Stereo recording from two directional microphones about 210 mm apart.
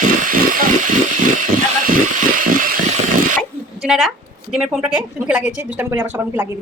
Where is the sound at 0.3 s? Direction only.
40° right (ahead or behind).